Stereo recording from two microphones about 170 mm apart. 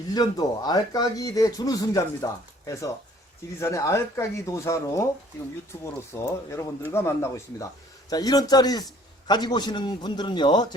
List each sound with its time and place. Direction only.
0.1 s speech: 25° left (ahead or behind)